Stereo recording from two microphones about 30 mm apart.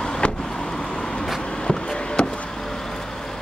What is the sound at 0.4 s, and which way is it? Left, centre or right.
Vehicle, left.